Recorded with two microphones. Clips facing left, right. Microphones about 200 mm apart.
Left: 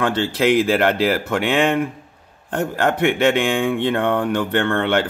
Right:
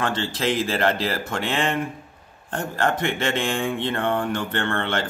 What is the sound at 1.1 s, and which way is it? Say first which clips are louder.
Speech: left 7 dB; 60° left (ahead or behind).